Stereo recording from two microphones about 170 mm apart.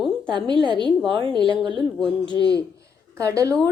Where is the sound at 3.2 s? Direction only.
20° right (ahead or behind).